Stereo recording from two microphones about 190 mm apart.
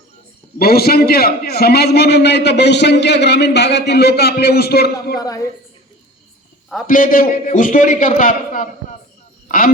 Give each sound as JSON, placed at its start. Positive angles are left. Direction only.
{"t": 0.6, "sound": "a man's voice", "side_deg": 55}
{"t": 5.2, "sound": "a woman's voice", "side_deg": 20}
{"t": 6.8, "sound": "a man's voice", "side_deg": 45}